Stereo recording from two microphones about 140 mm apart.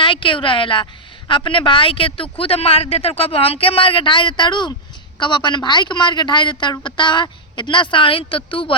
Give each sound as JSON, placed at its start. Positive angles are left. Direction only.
{"t": 0.0, "sound": "a woman's voice", "side_deg": 35}